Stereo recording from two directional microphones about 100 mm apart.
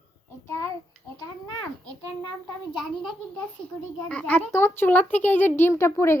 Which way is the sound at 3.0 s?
10° left (ahead or behind).